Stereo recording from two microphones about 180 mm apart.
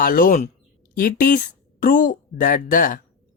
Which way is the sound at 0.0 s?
50° left (ahead or behind).